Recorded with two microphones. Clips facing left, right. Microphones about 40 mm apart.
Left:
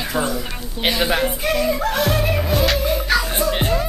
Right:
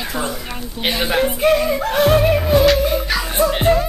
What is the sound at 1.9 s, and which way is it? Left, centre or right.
Music, right.